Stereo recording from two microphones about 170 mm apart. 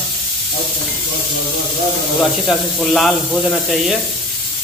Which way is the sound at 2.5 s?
Centre (ahead or behind).